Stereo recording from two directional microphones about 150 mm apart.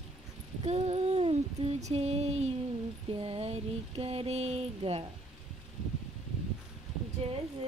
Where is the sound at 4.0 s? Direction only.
40° right (ahead or behind).